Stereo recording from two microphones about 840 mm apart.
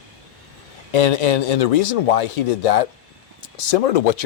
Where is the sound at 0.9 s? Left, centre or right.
Left.